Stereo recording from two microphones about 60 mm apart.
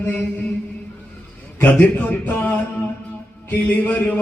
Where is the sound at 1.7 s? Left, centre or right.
Left.